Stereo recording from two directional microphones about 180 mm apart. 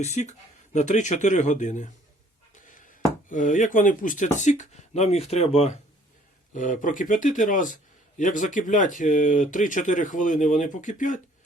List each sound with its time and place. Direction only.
0.0 s speech: 40° left (ahead or behind)
2.6 s a sound: 45° left (ahead or behind)
3.2 s speech: 45° left (ahead or behind)
6.5 s speech: 45° left (ahead or behind)